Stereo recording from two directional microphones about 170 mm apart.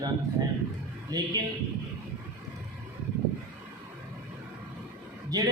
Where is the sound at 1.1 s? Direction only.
20° right (ahead or behind).